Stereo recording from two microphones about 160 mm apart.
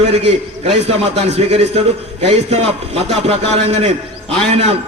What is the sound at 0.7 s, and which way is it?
A man's voice, 40° right (ahead or behind).